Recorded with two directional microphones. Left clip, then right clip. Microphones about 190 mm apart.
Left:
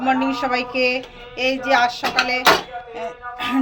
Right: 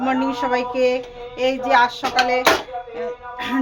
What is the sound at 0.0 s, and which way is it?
Speech, 20° right (ahead or behind).